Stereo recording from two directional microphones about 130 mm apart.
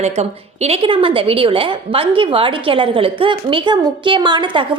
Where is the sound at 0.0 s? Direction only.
55° right (ahead or behind).